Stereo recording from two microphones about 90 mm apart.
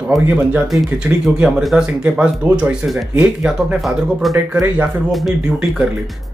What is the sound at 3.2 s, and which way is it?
Speech, 15° right (ahead or behind).